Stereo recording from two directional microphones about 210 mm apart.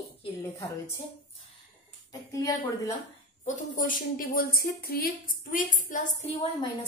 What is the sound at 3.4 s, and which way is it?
A woman's voice, 35° left (ahead or behind).